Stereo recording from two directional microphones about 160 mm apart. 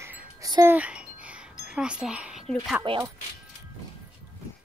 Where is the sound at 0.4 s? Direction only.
20° right (ahead or behind).